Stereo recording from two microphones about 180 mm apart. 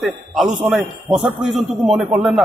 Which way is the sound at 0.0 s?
Centre (ahead or behind).